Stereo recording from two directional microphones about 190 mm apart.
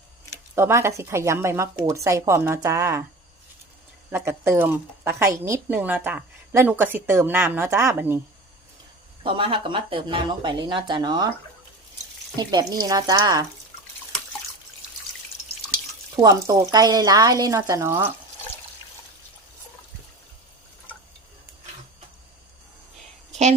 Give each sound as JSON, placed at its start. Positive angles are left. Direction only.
{"t": 0.5, "sound": "a woman's voice", "side_deg": -15}
{"t": 4.1, "sound": "a woman's voice", "side_deg": -10}
{"t": 9.2, "sound": "speech", "side_deg": -25}
{"t": 12.4, "sound": "speech", "side_deg": -20}
{"t": 16.1, "sound": "a woman's voice", "side_deg": -15}